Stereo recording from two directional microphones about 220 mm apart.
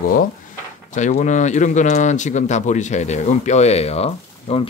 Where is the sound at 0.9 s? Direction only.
35° left (ahead or behind).